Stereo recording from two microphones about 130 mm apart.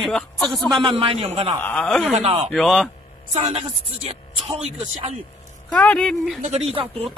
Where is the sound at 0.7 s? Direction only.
45° right (ahead or behind).